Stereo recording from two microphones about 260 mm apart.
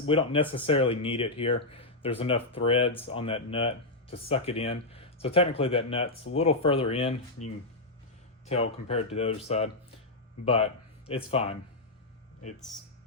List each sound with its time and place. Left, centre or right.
0.1 s speech: left